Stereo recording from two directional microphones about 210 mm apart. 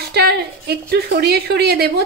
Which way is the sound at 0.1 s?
50° right (ahead or behind).